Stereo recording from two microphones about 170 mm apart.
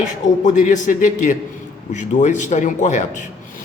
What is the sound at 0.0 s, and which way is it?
A man's voice, 45° left (ahead or behind).